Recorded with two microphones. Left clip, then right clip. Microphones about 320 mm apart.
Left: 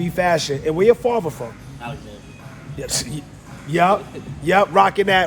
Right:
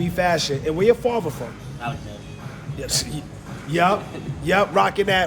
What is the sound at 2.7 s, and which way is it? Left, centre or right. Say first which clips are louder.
A man's voice: even; left.